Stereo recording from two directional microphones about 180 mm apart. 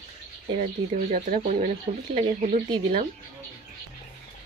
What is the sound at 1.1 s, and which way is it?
Speech, 45° right (ahead or behind).